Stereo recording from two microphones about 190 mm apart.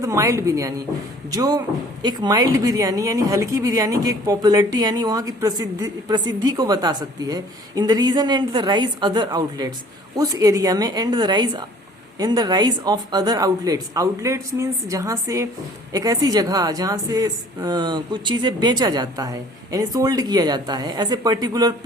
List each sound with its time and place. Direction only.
0.0 s a woman's voice: 15° right (ahead or behind)